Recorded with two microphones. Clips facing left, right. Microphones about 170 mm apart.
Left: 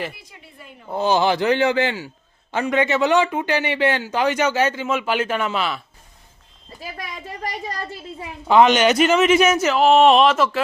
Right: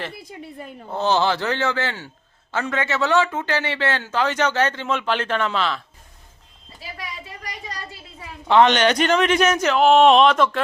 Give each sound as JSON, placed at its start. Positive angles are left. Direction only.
{"t": 0.9, "sound": "speech", "side_deg": 10}
{"t": 6.8, "sound": "a sound", "side_deg": 45}
{"t": 8.4, "sound": "speech", "side_deg": 10}